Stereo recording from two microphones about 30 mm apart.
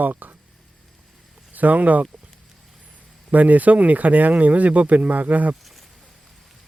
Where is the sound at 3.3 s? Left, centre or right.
Right.